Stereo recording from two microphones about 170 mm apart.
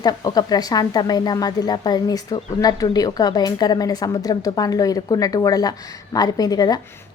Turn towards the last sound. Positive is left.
turn(degrees=25)  # may be behind; listen again after turning